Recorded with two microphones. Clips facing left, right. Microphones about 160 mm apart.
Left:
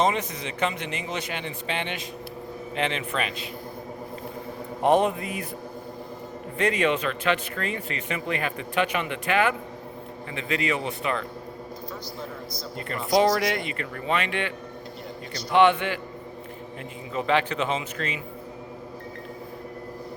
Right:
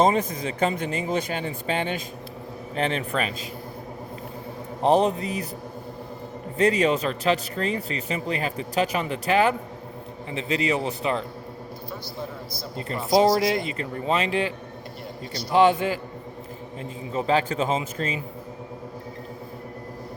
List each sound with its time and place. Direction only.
0.0 s speech: 40° right (ahead or behind)
4.8 s speech: 35° right (ahead or behind)
6.6 s speech: 35° right (ahead or behind)
12.7 s speech: 30° right (ahead or behind)
15.5 s speech: 35° right (ahead or behind)
17.1 s speech: 35° right (ahead or behind)